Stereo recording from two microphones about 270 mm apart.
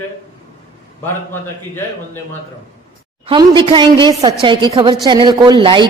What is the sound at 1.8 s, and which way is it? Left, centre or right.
Speech, centre.